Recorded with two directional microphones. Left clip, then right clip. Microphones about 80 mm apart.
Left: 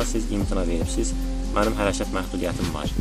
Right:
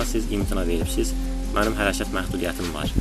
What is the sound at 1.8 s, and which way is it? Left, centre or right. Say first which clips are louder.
Speech: even; left.